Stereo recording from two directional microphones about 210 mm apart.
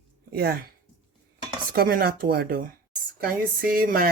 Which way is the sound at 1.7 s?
45° right (ahead or behind).